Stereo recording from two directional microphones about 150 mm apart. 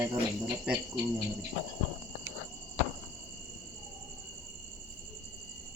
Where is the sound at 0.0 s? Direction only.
20° right (ahead or behind).